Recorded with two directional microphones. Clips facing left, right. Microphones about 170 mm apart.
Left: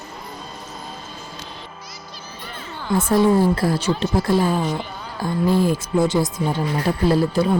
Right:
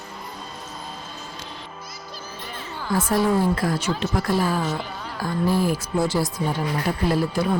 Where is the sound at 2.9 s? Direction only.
25° left (ahead or behind).